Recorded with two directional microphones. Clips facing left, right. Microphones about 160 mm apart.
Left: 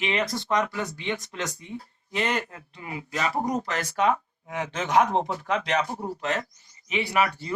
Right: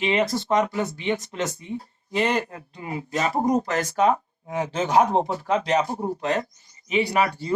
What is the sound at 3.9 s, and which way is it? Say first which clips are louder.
Speech: right 1 dB; 40° right (ahead or behind).